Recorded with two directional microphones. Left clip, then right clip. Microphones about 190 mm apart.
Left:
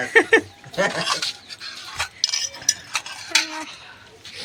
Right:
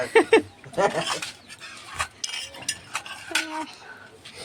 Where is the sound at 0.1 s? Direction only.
5° right (ahead or behind).